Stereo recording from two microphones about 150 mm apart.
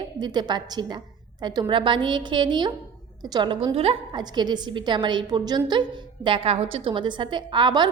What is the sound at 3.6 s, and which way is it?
A woman's voice, 40° right (ahead or behind).